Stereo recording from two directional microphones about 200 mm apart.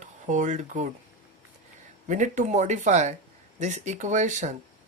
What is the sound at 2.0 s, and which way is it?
Speech, 40° right (ahead or behind).